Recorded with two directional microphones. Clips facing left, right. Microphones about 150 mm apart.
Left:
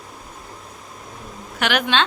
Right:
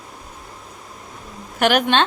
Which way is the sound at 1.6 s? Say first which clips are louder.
Right 4 dB; 45° right (ahead or behind).